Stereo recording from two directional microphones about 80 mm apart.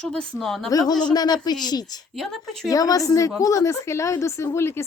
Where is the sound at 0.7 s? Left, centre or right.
Left.